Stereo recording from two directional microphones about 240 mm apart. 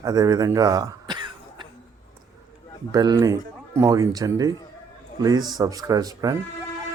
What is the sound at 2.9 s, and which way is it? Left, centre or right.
Speech, centre.